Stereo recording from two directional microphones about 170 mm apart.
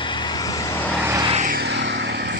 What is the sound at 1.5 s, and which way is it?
Vehicle, 70° right (ahead or behind).